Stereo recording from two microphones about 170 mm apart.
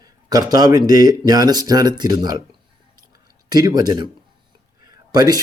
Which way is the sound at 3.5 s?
25° right (ahead or behind).